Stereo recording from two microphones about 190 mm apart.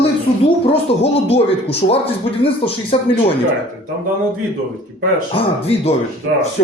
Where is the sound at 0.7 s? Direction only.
30° left (ahead or behind).